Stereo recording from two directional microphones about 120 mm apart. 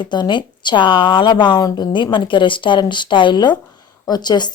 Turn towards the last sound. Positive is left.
turn(degrees=35)  # may be behind; listen again after turning